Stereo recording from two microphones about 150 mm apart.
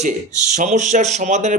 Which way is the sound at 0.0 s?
55° right (ahead or behind).